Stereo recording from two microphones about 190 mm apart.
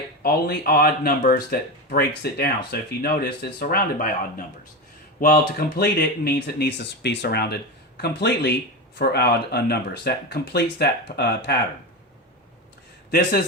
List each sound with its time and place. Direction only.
0.2 s speech: 55° left (ahead or behind)
13.1 s a man's voice: 50° left (ahead or behind)